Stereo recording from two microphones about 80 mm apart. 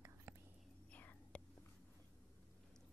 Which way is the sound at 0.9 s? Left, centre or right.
Centre.